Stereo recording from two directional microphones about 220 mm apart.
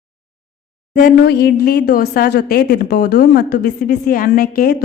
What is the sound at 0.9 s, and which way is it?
Speech, 40° left (ahead or behind).